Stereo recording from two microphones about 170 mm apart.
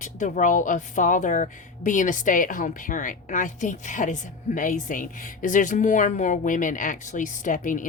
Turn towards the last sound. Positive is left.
turn(degrees=50)  # may be behind; listen again after turning